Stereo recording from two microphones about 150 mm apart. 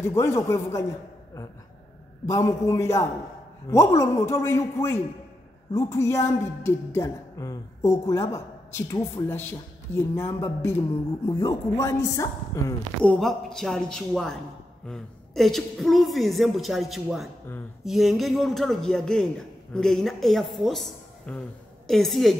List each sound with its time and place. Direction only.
0.0 s a woman's voice: 20° left (ahead or behind)
2.2 s a woman's voice: 20° left (ahead or behind)
13.0 s a woman's voice: 5° left (ahead or behind)